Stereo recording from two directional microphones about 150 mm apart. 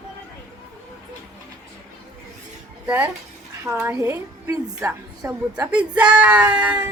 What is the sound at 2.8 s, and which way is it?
A woman's voice, 15° right (ahead or behind).